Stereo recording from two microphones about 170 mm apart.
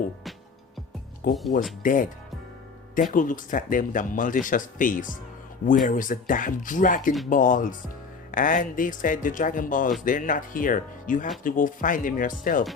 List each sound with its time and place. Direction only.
1.3 s speech: centre (ahead or behind)
1.8 s speech: 50° left (ahead or behind)